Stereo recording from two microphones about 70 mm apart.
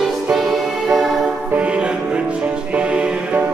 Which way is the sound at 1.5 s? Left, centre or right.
Centre.